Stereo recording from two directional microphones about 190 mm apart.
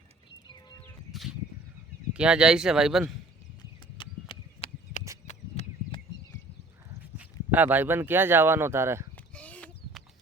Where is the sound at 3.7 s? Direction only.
25° left (ahead or behind).